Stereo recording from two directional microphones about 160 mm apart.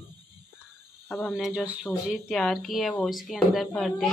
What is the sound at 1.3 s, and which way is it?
A woman's voice, 5° right (ahead or behind).